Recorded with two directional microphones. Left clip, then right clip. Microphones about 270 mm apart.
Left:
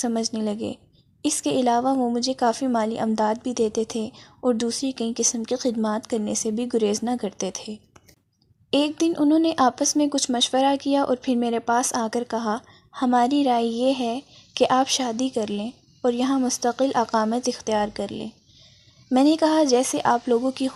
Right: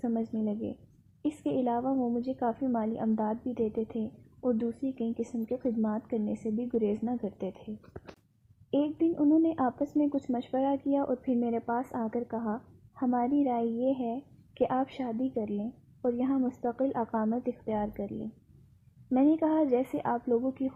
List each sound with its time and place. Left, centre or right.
0.0 s speech: left
8.7 s speech: left